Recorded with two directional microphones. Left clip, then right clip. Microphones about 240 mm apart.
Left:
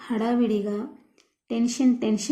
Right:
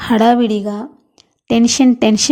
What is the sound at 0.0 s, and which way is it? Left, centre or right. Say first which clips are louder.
Speech: right 13 dB; right.